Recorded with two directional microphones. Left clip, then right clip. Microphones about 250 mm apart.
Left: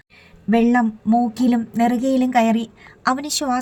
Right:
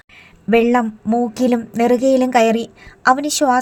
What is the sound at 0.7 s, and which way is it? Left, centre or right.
A woman's voice, right.